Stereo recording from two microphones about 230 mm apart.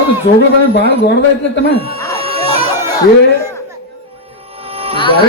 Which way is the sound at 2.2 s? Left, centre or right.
Right.